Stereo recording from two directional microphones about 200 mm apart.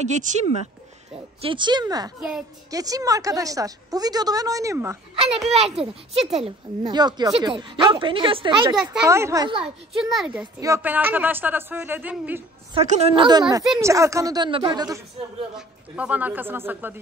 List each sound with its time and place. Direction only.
0.0 s speech: 35° right (ahead or behind)
1.4 s a woman's voice: 25° right (ahead or behind)
5.5 s speech: 30° right (ahead or behind)
9.0 s a woman's voice: 15° right (ahead or behind)
9.9 s speech: centre (ahead or behind)
10.4 s a woman's voice: 15° right (ahead or behind)
12.7 s a woman's voice: 35° right (ahead or behind); by 15.0 s 20° right (ahead or behind)
15.5 s a woman's voice: 5° right (ahead or behind)